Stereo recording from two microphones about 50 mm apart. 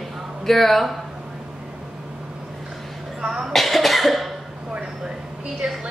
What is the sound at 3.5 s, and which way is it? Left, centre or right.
Cough, centre.